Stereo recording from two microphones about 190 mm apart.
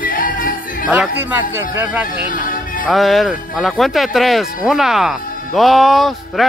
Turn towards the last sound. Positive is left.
turn(degrees=0)  # may be behind; listen again after turning